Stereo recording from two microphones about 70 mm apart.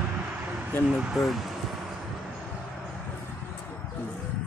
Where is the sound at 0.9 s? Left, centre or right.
Centre.